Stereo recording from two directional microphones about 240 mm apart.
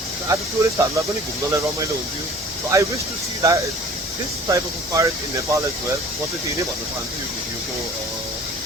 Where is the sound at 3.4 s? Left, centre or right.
Centre.